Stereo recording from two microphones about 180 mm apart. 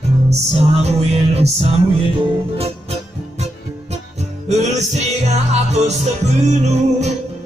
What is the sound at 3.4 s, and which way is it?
Music, 40° right (ahead or behind).